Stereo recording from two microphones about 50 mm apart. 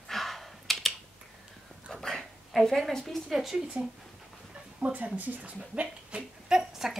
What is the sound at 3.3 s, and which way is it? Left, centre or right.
Speech, centre.